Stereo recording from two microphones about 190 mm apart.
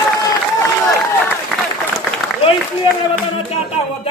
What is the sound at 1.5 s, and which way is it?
Applause, 5° left (ahead or behind).